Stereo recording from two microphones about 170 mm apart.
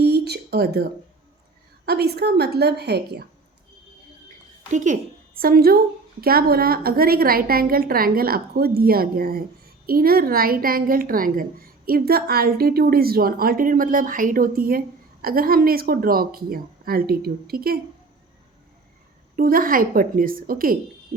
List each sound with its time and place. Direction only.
0.0 s a sound: 70° right (ahead or behind)
1.8 s a woman's voice: 70° right (ahead or behind)
4.7 s a woman's voice: 45° right (ahead or behind)
5.4 s a woman's voice: 60° right (ahead or behind)
19.4 s a woman's voice: 60° right (ahead or behind)